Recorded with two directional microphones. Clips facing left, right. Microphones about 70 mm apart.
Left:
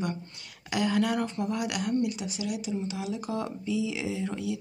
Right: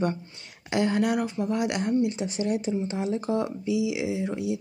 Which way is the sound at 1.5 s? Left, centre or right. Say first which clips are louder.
Right 6 dB; right.